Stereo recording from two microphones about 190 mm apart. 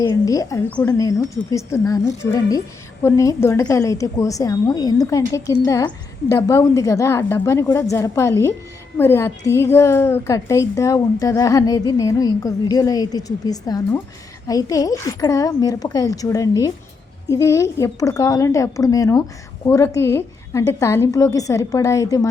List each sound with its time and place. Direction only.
0.0 s a woman's voice: 20° left (ahead or behind)